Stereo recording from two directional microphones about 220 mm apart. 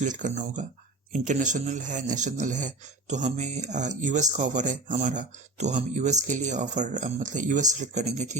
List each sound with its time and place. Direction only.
0.0 s a man's voice: 35° right (ahead or behind)